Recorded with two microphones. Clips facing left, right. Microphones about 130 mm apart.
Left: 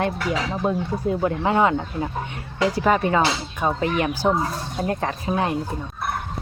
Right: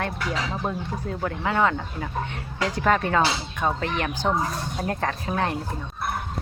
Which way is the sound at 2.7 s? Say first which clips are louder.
Left 1 dB; 10° left (ahead or behind).